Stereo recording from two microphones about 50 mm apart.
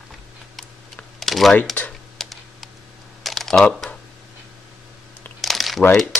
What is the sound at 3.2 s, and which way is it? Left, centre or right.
Typing, centre.